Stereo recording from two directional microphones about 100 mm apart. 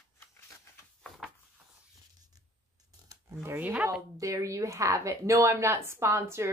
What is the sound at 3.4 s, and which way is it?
Speech, 20° right (ahead or behind).